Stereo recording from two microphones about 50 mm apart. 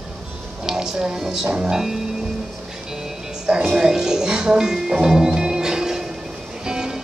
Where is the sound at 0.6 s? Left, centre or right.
Centre.